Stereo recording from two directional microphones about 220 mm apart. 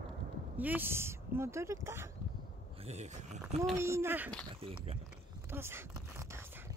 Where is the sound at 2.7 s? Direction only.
30° right (ahead or behind).